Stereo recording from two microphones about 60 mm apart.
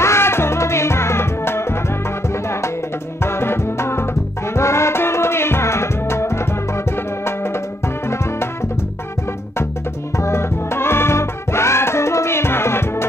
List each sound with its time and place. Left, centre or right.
0.0 s music: left
3.2 s music: left
10.1 s music: left